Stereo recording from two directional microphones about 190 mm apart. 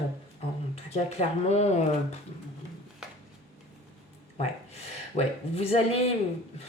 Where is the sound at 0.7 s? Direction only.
35° left (ahead or behind).